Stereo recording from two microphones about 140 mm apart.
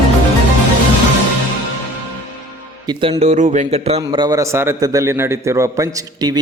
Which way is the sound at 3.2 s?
60° right (ahead or behind).